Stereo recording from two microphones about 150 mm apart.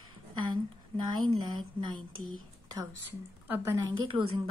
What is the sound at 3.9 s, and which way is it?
Speech, 35° right (ahead or behind).